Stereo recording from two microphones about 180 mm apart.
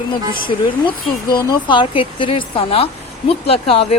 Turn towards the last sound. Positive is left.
turn(degrees=30)  # may be behind; listen again after turning